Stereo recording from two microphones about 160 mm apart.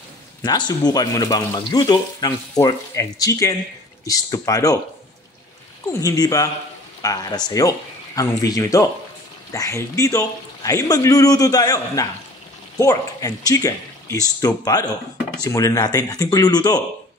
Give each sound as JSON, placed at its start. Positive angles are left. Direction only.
{"t": 0.5, "sound": "speech", "side_deg": 25}
{"t": 5.9, "sound": "speech", "side_deg": 20}